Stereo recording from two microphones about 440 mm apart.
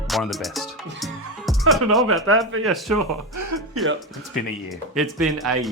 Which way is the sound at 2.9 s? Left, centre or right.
Right.